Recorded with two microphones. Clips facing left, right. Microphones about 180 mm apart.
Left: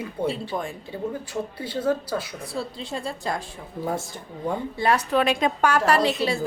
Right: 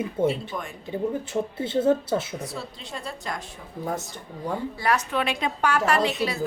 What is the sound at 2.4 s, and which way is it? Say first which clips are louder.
A woman's voice: left 4 dB; 30° left (ahead or behind).